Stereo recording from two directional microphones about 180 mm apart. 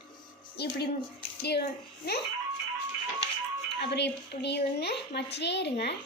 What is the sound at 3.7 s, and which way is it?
A woman's voice, 70° left (ahead or behind).